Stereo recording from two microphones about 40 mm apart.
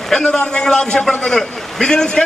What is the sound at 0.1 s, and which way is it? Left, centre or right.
A man's voice, centre.